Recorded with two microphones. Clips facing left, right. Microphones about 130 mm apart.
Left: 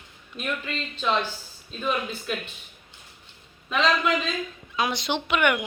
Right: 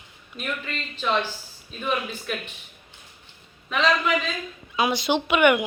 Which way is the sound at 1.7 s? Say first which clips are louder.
Even; 5° right (ahead or behind).